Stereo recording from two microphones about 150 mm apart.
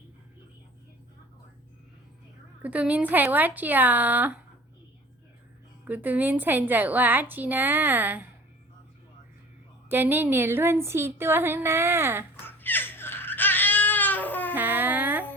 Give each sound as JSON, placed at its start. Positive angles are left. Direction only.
{"t": 2.6, "sound": "a woman's voice", "side_deg": -10}
{"t": 5.8, "sound": "a woman's voice", "side_deg": -10}
{"t": 9.9, "sound": "a woman's voice", "side_deg": -15}
{"t": 12.5, "sound": "crying", "side_deg": 15}
{"t": 14.5, "sound": "a sound", "side_deg": -10}